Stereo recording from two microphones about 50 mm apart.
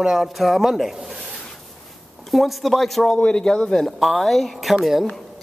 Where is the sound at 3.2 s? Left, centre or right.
Centre.